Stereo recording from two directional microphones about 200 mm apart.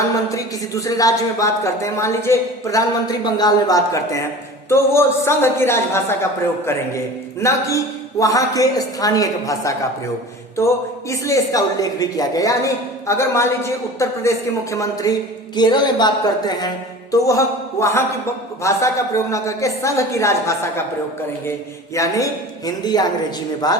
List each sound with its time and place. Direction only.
0.3 s a woman's voice: 15° left (ahead or behind)
11.1 s a woman's voice: 15° left (ahead or behind)
21.9 s a man's voice: 15° left (ahead or behind)